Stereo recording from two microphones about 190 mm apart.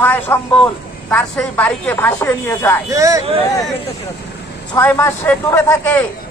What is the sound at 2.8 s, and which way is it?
Speech, 15° right (ahead or behind).